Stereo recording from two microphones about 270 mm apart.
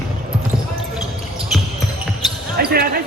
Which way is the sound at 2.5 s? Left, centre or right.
Right.